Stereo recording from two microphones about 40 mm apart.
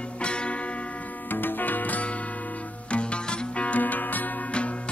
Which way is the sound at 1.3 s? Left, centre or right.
Left.